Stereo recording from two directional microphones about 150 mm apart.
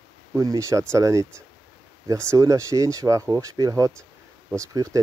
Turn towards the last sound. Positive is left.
turn(degrees=-20)  # may be behind; listen again after turning